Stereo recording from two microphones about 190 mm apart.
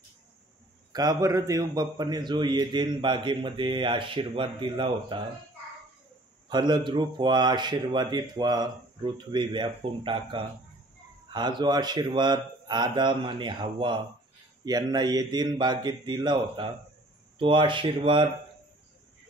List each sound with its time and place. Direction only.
0.9 s a man's voice: 15° right (ahead or behind)
6.5 s a man's voice: 25° right (ahead or behind)